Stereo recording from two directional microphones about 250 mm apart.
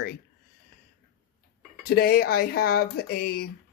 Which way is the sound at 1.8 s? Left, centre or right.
Left.